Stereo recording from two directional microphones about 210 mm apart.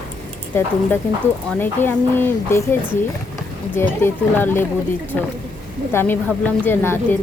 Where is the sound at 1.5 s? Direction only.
10° left (ahead or behind).